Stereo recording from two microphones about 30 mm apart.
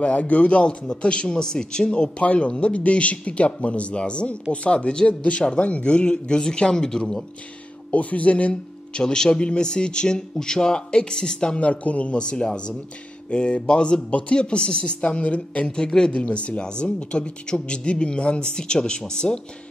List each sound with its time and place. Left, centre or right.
0.0 s speech: left
1.4 s speech: left
2.2 s speech: left
7.9 s a man's voice: left
8.9 s speech: left
9.3 s speech: left
11.6 s a man's voice: left
15.0 s a man's voice: left
15.6 s speech: left
16.1 s speech: left